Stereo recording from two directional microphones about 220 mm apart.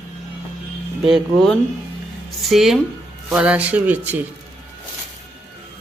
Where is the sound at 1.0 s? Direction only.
Centre (ahead or behind).